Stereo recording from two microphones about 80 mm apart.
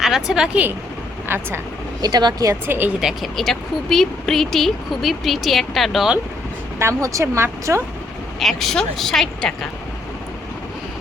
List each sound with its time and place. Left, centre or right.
0.0 s speech: centre
1.3 s speech: right
2.0 s speech: right
2.6 s speech: right
3.0 s speech: centre
3.3 s speech: centre
6.7 s speech: right
8.4 s speech: centre